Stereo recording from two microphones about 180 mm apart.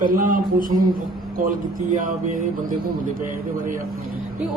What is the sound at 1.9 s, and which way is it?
Speech, 50° right (ahead or behind).